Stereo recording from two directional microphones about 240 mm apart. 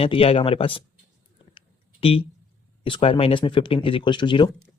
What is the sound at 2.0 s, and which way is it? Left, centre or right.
Speech, left.